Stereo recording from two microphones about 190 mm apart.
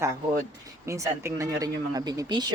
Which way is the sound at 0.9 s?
15° right (ahead or behind).